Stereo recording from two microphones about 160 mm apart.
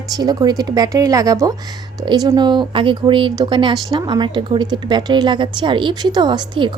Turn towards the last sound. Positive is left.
turn(degrees=-30)  # may be behind; listen again after turning